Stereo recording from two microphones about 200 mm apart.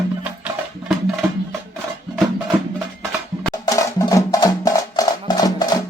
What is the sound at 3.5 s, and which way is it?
Music, 15° left (ahead or behind).